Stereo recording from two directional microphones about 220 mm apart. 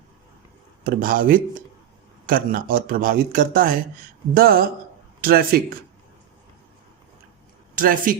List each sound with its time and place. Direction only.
0.9 s a man's voice: 40° right (ahead or behind)
7.8 s a man's voice: 40° right (ahead or behind)